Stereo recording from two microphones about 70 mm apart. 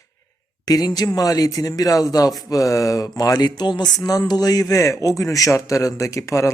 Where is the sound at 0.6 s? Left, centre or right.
Left.